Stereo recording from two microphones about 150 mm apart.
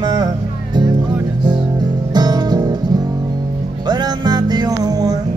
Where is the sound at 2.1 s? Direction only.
30° right (ahead or behind).